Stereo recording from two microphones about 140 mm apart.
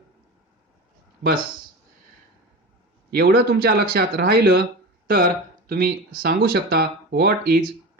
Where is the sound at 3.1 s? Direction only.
90° right.